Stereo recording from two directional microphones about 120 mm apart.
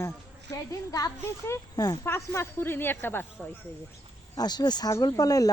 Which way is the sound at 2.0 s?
20° left (ahead or behind).